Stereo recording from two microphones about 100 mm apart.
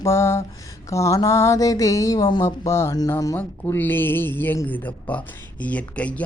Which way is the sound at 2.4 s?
25° left (ahead or behind).